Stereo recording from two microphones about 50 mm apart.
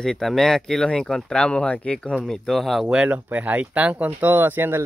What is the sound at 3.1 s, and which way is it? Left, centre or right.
Speech, right.